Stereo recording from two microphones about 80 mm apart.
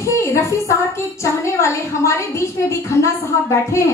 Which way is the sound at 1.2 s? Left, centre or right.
Left.